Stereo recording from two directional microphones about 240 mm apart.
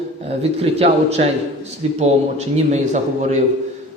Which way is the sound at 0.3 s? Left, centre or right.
Right.